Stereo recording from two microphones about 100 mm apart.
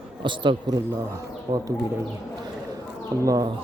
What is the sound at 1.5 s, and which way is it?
Speech, 40° right (ahead or behind).